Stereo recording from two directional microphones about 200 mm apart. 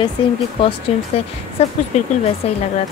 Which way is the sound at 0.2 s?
25° left (ahead or behind).